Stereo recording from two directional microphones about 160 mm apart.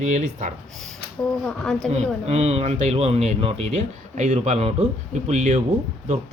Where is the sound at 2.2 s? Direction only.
40° right (ahead or behind).